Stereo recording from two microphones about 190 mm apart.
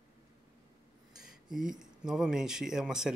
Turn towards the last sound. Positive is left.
turn(degrees=-5)  # may be behind; listen again after turning